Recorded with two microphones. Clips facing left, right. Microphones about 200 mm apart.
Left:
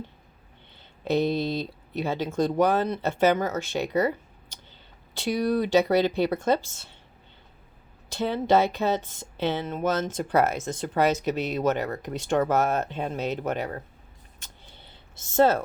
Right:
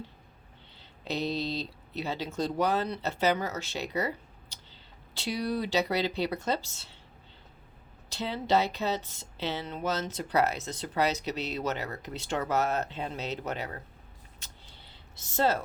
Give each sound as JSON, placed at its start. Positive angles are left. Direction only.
{"t": 0.8, "sound": "speech", "side_deg": 50}
{"t": 8.1, "sound": "speech", "side_deg": 50}
{"t": 15.4, "sound": "speech", "side_deg": 50}